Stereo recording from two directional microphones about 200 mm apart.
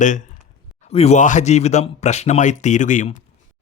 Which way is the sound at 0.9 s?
30° left (ahead or behind).